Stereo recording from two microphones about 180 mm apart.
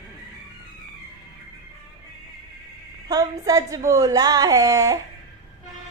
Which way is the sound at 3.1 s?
20° right (ahead or behind).